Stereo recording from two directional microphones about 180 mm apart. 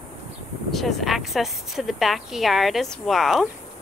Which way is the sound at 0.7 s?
Centre (ahead or behind).